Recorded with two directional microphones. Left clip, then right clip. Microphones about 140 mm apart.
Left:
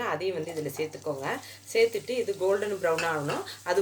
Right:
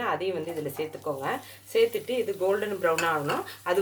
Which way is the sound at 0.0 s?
5° right (ahead or behind).